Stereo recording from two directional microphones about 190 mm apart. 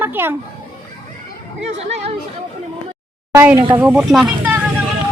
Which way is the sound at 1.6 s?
35° right (ahead or behind).